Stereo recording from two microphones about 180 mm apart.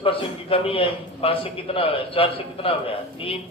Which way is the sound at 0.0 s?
30° left (ahead or behind).